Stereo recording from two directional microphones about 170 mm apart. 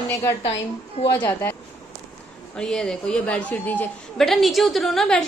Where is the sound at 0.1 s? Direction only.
15° left (ahead or behind).